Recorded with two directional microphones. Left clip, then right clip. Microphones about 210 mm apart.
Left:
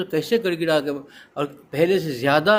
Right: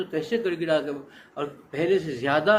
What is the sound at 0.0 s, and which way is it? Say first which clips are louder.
Speech: left 5 dB; 55° left (ahead or behind).